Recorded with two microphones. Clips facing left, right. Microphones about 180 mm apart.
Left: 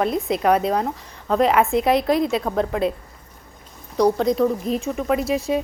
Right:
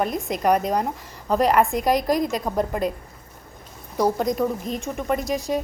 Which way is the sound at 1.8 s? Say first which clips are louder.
Left 2 dB; 45° right (ahead or behind).